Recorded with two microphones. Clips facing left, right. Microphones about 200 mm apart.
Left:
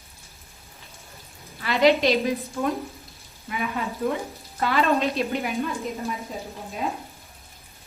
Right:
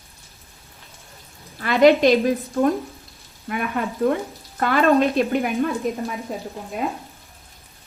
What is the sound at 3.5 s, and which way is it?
Speech, 55° right (ahead or behind).